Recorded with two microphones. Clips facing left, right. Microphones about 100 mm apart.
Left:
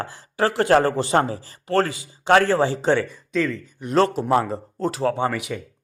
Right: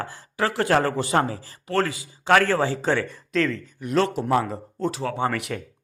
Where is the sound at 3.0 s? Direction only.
Centre (ahead or behind).